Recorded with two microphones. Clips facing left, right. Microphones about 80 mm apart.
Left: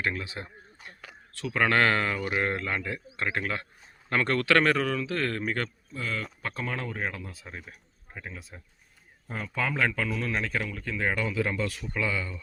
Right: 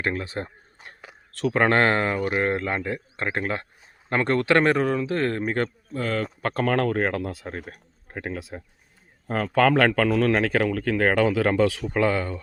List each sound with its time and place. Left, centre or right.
0.0 s speech: right
0.8 s whispering: right
1.5 s speech: right
5.9 s speech: right
6.4 s speech: right